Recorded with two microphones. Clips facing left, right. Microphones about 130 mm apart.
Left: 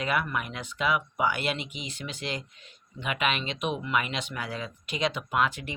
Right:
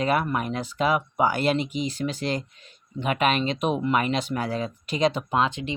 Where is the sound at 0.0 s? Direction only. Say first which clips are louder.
Right 5 dB; 35° right (ahead or behind).